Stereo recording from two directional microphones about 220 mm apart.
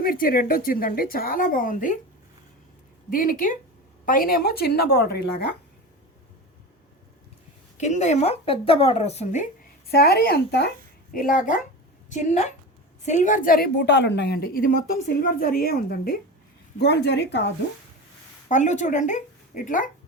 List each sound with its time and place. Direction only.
0.0 s speech: 40° left (ahead or behind)
3.1 s a woman's voice: 40° left (ahead or behind)
7.8 s speech: 30° left (ahead or behind)
9.9 s a woman's voice: 45° left (ahead or behind)
18.4 s a woman's voice: 35° left (ahead or behind)